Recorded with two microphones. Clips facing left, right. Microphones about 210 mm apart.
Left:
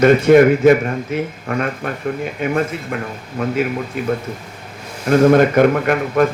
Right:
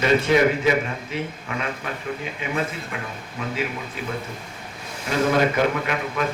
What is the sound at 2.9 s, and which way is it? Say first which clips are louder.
A man's voice: left 8 dB; 55° left (ahead or behind).